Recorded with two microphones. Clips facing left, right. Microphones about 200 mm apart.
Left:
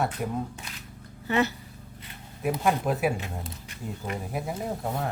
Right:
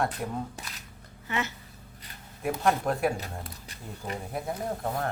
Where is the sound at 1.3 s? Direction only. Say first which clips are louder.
Left 7 dB; 35° left (ahead or behind).